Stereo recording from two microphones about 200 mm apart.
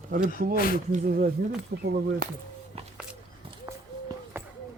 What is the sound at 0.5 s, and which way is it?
Speech, 45° left (ahead or behind).